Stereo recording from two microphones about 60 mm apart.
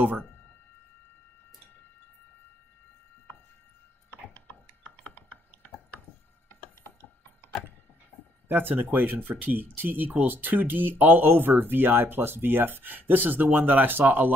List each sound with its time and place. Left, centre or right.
4.1 s ratchet: left
8.5 s speech: right